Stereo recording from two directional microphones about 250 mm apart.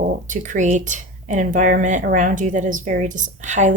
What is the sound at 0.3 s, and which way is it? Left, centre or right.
A woman's voice, right.